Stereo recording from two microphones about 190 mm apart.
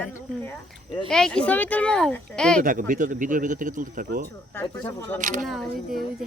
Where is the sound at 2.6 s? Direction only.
45° right (ahead or behind).